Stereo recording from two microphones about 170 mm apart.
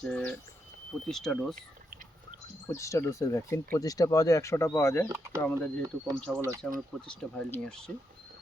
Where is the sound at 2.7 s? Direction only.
20° left (ahead or behind).